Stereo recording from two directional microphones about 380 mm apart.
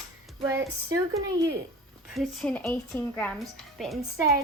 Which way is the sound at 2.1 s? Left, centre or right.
Centre.